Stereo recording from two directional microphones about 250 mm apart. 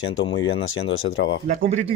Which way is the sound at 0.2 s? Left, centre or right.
Left.